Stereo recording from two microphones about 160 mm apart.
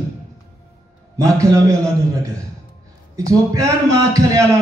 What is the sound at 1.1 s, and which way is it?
Speech, 20° right (ahead or behind).